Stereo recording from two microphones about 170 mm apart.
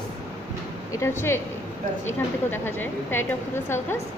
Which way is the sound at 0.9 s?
15° left (ahead or behind).